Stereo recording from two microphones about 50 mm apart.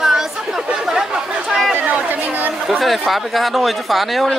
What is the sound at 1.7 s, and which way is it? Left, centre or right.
Chatter, right.